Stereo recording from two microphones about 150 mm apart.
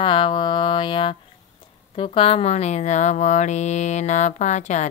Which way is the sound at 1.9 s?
35° left (ahead or behind).